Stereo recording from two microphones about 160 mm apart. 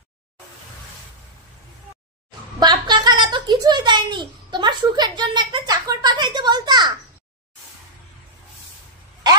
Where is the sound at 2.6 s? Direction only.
25° right (ahead or behind).